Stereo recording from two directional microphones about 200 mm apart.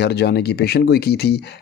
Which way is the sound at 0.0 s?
55° left (ahead or behind).